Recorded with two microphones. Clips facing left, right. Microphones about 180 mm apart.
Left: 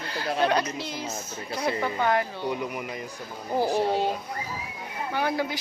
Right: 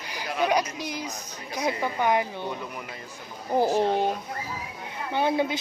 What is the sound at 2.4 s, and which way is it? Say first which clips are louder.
Speech: left 4 dB; 10° left (ahead or behind).